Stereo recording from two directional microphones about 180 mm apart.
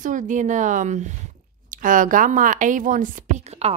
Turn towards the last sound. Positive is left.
turn(degrees=-35)  # may be behind; listen again after turning